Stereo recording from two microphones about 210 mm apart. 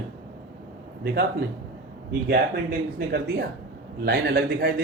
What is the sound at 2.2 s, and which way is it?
Speech, 50° right (ahead or behind).